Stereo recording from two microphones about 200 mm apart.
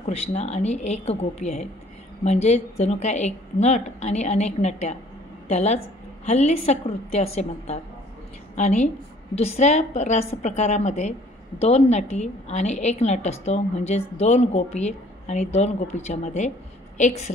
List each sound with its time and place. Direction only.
0.0 s a woman's voice: 35° left (ahead or behind)